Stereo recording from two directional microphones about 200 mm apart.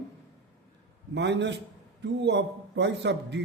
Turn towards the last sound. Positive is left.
turn(degrees=-60)  # may be behind; listen again after turning